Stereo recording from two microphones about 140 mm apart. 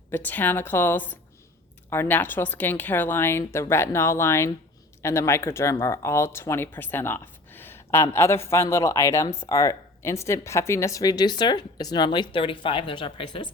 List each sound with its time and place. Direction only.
0.1 s speech: 15° left (ahead or behind); by 13.5 s 35° left (ahead or behind)